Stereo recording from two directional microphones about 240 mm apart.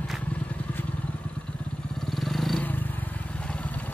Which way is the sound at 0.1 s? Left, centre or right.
Centre.